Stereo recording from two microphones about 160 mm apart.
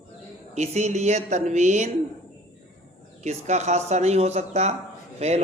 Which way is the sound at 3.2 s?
45° right (ahead or behind).